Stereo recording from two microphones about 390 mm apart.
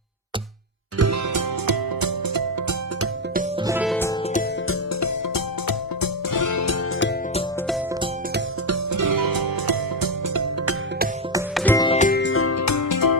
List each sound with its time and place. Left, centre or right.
0.9 s music: right
3.7 s music: centre
4.7 s music: left
8.6 s music: right
11.3 s music: centre
11.6 s music: centre; by 13.1 s left